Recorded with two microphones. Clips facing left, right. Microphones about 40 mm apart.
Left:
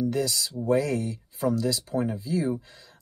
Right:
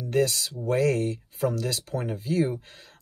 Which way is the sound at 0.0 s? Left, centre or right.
Right.